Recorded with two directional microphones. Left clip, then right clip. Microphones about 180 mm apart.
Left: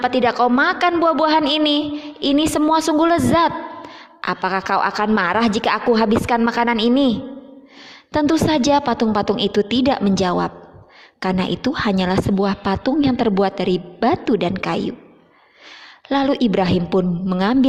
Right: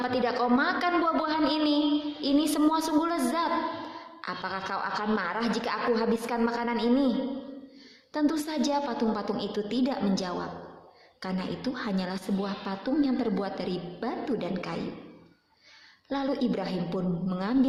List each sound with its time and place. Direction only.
0.0 s a woman's voice: 40° left (ahead or behind)
16.0 s a woman's voice: 45° left (ahead or behind)